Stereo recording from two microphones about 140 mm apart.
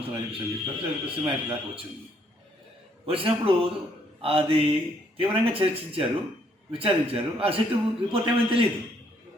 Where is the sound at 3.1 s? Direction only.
40° right (ahead or behind).